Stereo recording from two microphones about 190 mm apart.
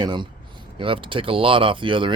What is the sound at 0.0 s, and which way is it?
A man's voice, 25° right (ahead or behind).